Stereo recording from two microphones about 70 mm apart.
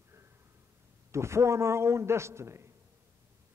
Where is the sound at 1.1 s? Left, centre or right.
Right.